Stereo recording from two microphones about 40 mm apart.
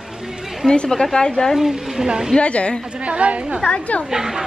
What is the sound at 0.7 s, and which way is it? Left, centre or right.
Speech, centre.